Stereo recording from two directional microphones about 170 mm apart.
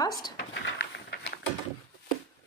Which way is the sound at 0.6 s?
90° left.